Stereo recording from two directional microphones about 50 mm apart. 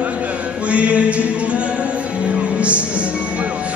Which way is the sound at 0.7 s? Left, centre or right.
Right.